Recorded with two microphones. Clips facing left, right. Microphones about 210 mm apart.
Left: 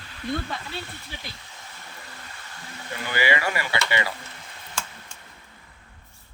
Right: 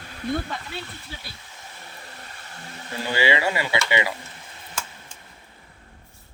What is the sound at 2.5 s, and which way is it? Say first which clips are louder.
Speech: right 2 dB; 30° right (ahead or behind).